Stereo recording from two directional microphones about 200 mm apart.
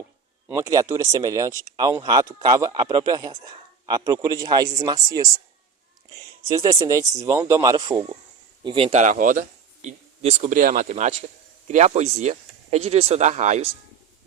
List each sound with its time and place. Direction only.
0.5 s a man's voice: 15° right (ahead or behind); by 13.7 s 35° right (ahead or behind)